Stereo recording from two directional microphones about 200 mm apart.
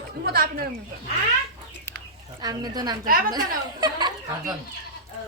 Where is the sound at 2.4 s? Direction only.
20° right (ahead or behind).